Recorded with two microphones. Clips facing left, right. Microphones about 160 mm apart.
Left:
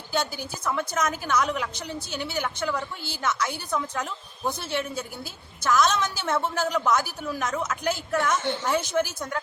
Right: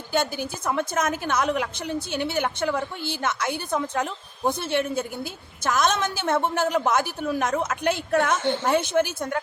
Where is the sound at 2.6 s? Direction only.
20° right (ahead or behind).